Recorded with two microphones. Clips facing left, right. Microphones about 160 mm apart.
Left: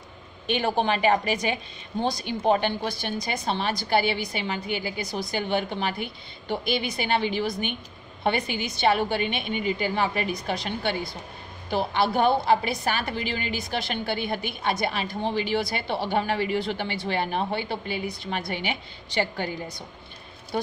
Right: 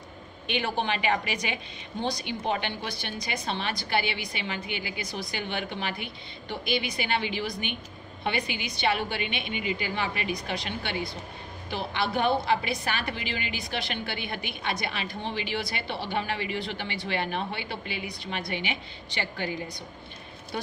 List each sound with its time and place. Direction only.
0.5 s a woman's voice: 40° left (ahead or behind)
20.5 s a woman's voice: 40° left (ahead or behind)